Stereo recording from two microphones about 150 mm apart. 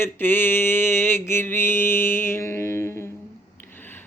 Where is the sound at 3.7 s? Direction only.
15° left (ahead or behind).